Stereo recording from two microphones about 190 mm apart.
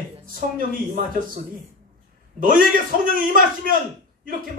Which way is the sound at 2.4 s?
45° right (ahead or behind).